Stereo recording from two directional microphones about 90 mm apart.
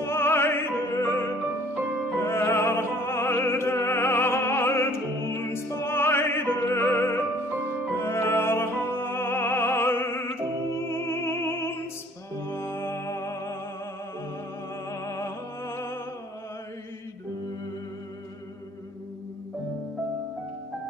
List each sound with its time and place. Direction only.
0.0 s opera: 25° left (ahead or behind)
2.1 s music: 25° left (ahead or behind)
14.9 s music: 35° left (ahead or behind)